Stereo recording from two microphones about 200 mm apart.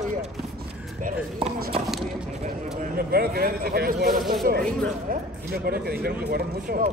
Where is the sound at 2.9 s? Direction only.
50° right (ahead or behind).